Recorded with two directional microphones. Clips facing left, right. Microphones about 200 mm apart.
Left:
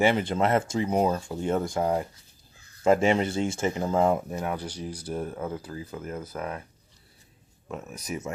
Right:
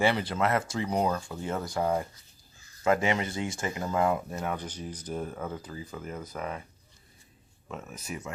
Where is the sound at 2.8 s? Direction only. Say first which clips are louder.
Left 5 dB; 30° left (ahead or behind).